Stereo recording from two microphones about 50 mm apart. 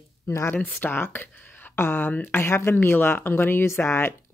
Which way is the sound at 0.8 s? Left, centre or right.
Left.